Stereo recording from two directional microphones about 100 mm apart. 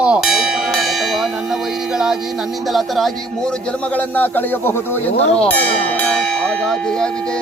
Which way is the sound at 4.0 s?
20° left (ahead or behind).